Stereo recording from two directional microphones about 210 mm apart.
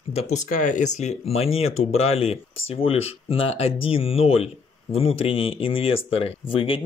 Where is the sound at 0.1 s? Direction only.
35° left (ahead or behind).